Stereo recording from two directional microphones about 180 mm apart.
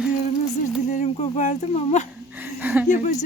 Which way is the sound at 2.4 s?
10° right (ahead or behind).